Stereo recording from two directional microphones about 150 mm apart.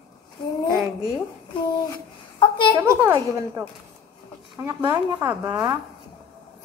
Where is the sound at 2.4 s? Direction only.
30° left (ahead or behind).